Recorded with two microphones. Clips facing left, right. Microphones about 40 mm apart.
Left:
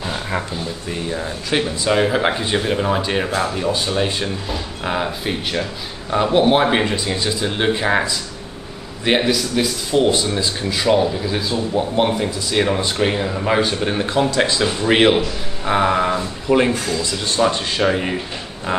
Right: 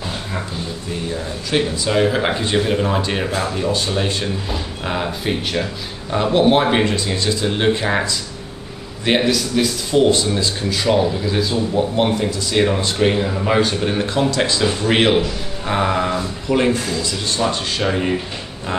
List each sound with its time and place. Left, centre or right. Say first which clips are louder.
1.5 s speech: even; centre
12.1 s speech: right 1 dB; centre
12.4 s speech: right 1 dB; centre
17.4 s speech: left 4 dB; centre
17.8 s speech: even; centre